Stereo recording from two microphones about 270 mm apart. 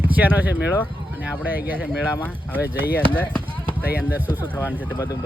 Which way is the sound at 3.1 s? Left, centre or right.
Centre.